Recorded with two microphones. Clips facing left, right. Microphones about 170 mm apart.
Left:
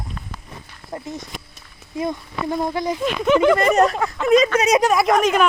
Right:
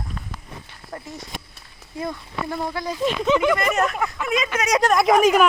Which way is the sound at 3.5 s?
35° left (ahead or behind).